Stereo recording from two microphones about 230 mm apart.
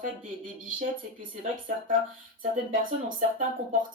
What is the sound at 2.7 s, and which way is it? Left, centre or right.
Speech, right.